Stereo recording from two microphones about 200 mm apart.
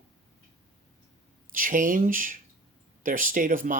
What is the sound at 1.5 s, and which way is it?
Speech, 40° right (ahead or behind).